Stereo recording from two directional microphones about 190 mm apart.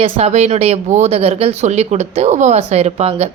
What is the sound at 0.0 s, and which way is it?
A woman's voice, 35° right (ahead or behind).